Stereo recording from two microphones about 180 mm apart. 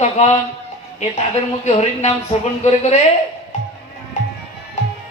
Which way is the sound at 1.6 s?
35° left (ahead or behind).